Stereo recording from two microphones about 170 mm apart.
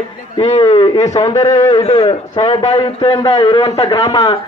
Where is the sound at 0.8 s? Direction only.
20° left (ahead or behind).